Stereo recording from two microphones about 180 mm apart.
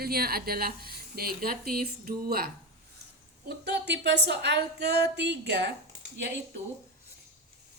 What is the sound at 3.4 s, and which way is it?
Speech, 70° right (ahead or behind).